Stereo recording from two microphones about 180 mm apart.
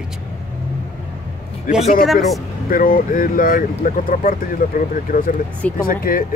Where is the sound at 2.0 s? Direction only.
Centre (ahead or behind).